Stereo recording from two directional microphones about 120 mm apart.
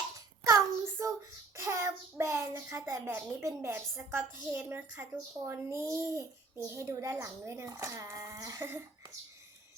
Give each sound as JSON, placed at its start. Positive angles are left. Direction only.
{"t": 0.4, "sound": "child singing", "side_deg": -25}
{"t": 1.5, "sound": "a child's voice", "side_deg": -25}